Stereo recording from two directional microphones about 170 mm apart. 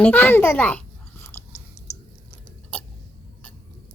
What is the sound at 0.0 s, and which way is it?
Speech, 10° left (ahead or behind).